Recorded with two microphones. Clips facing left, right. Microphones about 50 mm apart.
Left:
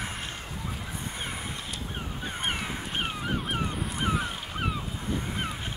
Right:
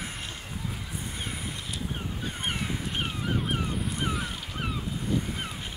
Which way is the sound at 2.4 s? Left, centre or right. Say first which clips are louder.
Even; centre.